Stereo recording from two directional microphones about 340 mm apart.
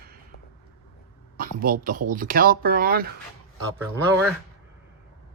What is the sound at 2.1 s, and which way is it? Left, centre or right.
Speech, right.